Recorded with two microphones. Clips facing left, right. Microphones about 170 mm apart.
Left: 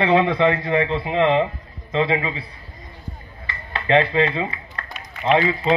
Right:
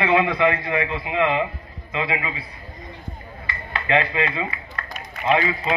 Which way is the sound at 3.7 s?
30° left (ahead or behind).